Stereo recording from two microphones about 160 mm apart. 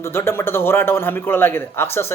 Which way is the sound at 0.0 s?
15° left (ahead or behind).